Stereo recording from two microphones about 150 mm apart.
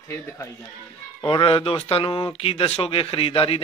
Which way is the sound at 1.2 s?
35° left (ahead or behind).